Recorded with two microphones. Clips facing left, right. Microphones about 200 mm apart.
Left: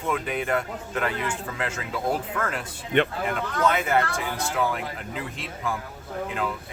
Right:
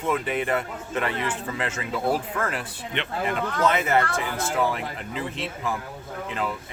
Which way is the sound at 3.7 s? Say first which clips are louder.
Even; centre (ahead or behind).